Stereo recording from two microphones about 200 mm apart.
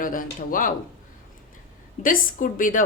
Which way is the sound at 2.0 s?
40° left (ahead or behind).